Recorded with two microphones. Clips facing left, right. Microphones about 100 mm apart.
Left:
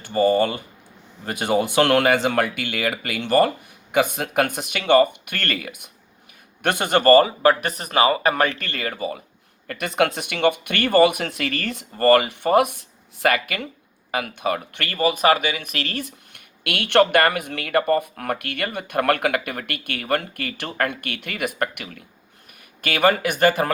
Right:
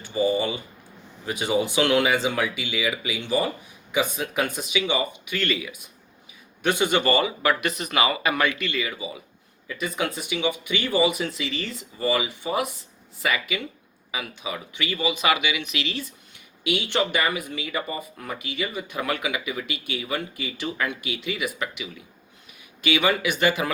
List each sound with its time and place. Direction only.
0.0 s a man's voice: 60° left (ahead or behind)
9.6 s a man's voice: 70° left (ahead or behind); by 23.7 s 50° left (ahead or behind)